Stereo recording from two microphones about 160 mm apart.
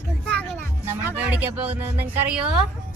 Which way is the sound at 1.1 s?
10° right (ahead or behind).